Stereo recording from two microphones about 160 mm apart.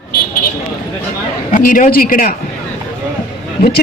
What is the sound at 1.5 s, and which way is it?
Speech, 60° left (ahead or behind).